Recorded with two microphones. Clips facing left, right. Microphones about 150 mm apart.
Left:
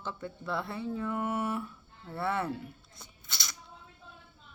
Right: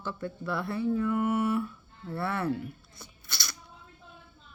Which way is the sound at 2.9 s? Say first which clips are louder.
Right 2 dB; 20° left (ahead or behind).